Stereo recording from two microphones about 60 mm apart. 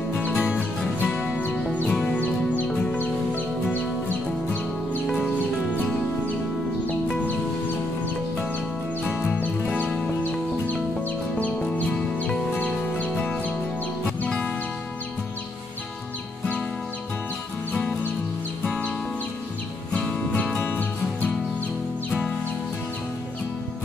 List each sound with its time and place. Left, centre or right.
0.2 s music: left
1.0 s music: centre
1.3 s music: left
1.9 s music: centre
2.1 s music: left
7.2 s music: left
9.1 s music: left
11.7 s music: left
19.9 s music: centre
20.6 s music: left